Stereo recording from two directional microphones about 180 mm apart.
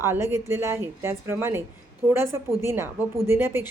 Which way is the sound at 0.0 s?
15° right (ahead or behind).